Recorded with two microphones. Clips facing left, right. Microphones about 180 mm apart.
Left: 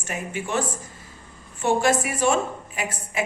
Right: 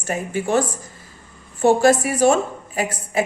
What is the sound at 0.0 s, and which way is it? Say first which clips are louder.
Speech: right 7 dB; 40° right (ahead or behind).